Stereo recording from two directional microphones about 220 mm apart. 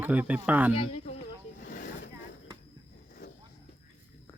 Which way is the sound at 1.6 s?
35° left (ahead or behind).